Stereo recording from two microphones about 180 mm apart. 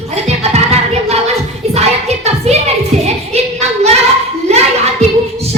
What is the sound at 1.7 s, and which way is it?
Music, 35° right (ahead or behind).